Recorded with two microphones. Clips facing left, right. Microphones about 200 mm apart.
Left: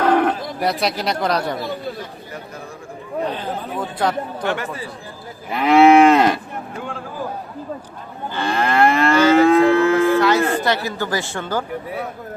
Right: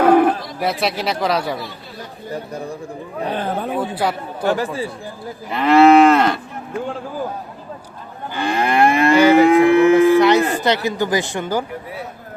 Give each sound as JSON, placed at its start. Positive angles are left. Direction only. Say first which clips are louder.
{"t": 0.0, "sound": "bird", "louder": "right 4 dB", "side_deg": -10}
{"t": 0.6, "sound": "speech", "louder": "even", "side_deg": 0}
{"t": 3.3, "sound": "speech", "louder": "right 4 dB", "side_deg": -55}
{"t": 3.8, "sound": "speech", "louder": "left 1 dB", "side_deg": -10}
{"t": 4.4, "sound": "speech", "louder": "right 7 dB", "side_deg": -35}
{"t": 5.5, "sound": "moo", "louder": "right 1 dB", "side_deg": 5}
{"t": 8.3, "sound": "livestock", "louder": "right 1 dB", "side_deg": -15}